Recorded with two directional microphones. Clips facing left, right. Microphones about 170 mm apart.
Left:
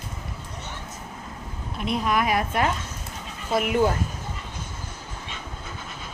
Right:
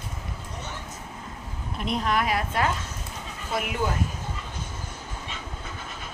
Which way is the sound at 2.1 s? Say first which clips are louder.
Left 2 dB; 20° left (ahead or behind).